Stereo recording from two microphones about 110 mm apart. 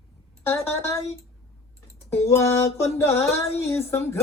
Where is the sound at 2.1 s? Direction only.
25° left (ahead or behind).